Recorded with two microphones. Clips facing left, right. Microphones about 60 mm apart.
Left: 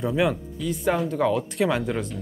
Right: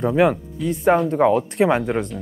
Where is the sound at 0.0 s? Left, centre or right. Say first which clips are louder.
Right 6 dB; right.